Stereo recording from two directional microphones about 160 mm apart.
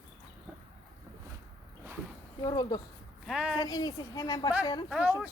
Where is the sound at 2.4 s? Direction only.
25° left (ahead or behind).